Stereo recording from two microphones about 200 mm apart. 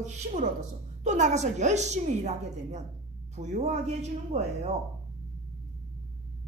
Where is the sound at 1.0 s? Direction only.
35° right (ahead or behind).